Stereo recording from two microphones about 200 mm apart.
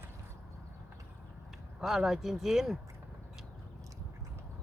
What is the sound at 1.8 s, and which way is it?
Speech, centre (ahead or behind).